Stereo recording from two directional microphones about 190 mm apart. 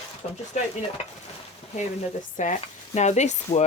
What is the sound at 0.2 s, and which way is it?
Speech, 35° left (ahead or behind).